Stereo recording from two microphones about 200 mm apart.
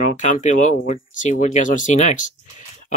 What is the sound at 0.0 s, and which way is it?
Speech, 35° left (ahead or behind).